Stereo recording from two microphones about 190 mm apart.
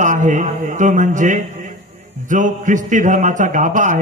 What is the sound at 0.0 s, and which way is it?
A man's voice, 40° right (ahead or behind).